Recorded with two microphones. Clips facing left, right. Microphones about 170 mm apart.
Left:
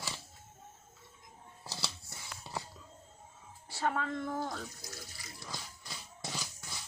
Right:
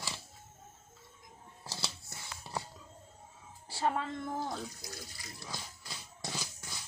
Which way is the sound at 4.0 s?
25° right (ahead or behind).